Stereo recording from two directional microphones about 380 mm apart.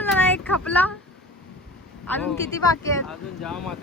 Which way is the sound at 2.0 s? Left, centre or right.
Centre.